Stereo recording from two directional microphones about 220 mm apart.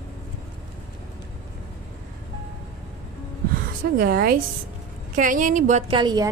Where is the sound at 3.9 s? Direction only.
45° right (ahead or behind).